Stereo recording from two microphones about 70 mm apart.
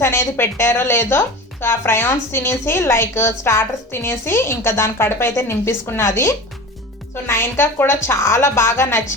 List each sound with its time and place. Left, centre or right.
0.0 s a woman's voice: left
6.0 s a woman's voice: left